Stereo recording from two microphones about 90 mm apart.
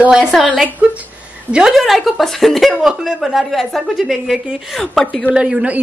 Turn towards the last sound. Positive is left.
turn(degrees=-10)  # may be behind; listen again after turning